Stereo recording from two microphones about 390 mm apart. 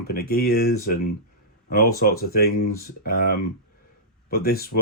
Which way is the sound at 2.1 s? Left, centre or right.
Left.